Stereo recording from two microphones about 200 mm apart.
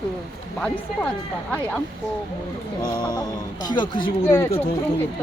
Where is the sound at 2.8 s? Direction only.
20° left (ahead or behind).